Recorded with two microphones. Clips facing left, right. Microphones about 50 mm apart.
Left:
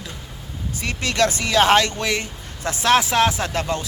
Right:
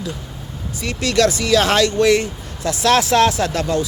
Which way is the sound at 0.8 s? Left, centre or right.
Left.